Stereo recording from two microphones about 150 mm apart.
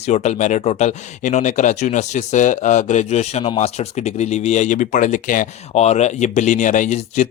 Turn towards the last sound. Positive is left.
turn(degrees=55)  # may be behind; listen again after turning